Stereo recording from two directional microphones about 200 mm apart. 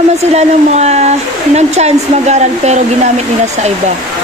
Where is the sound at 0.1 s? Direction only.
35° right (ahead or behind).